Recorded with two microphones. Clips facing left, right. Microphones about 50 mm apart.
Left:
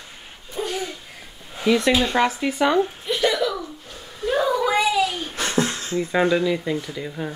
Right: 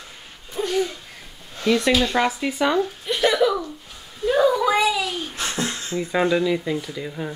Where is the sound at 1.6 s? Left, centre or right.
Centre.